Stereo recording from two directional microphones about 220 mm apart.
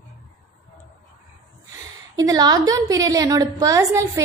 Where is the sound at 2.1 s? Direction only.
15° right (ahead or behind).